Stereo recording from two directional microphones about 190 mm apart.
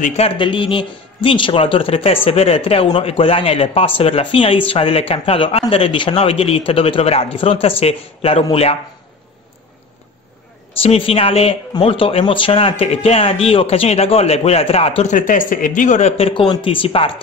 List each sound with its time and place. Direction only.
0.0 s a man's voice: 35° left (ahead or behind)
10.8 s speech: 30° left (ahead or behind)